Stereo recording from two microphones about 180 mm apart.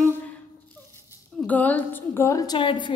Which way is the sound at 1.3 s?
10° left (ahead or behind).